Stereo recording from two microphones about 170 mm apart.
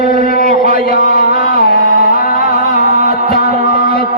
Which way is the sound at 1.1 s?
55° left (ahead or behind).